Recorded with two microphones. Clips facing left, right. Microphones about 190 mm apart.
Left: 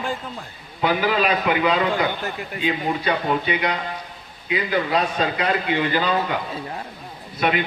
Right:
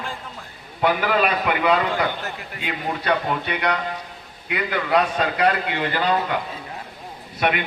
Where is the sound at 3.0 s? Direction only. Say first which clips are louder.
Left 1 dB; 60° right (ahead or behind).